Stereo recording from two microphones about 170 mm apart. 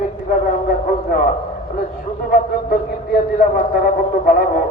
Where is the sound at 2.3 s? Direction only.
55° left (ahead or behind).